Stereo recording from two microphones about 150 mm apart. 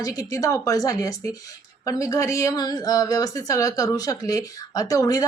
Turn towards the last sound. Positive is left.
turn(degrees=25)  # may be behind; listen again after turning